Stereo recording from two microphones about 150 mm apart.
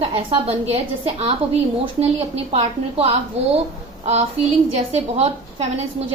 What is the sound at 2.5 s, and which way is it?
A woman's voice, 40° right (ahead or behind).